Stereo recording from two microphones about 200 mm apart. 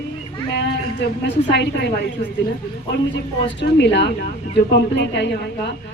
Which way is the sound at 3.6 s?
60° left (ahead or behind).